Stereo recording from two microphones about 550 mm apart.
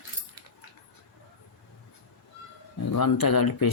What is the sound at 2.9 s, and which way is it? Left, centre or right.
Speech, left.